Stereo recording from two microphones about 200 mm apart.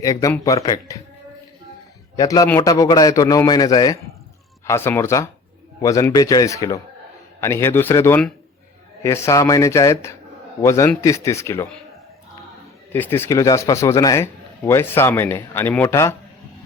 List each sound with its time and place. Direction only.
0.0 s a man's voice: 15° left (ahead or behind)
2.1 s a man's voice: 15° left (ahead or behind)
12.9 s a man's voice: 10° left (ahead or behind)